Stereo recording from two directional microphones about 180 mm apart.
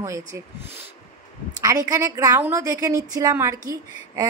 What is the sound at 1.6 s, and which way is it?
A woman's voice, 20° right (ahead or behind).